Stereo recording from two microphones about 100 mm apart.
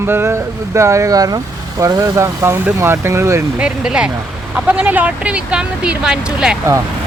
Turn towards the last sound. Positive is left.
turn(degrees=-5)  # may be behind; listen again after turning